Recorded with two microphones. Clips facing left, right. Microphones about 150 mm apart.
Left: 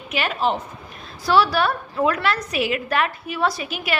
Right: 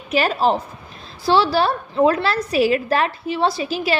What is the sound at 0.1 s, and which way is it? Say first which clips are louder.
A woman's voice: right 5 dB; 35° right (ahead or behind).